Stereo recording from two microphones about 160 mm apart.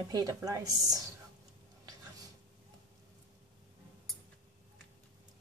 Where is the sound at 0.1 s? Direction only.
20° right (ahead or behind).